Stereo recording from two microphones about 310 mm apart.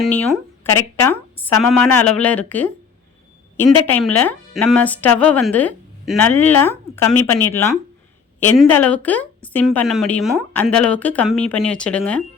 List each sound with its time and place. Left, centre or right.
0.0 s speech: centre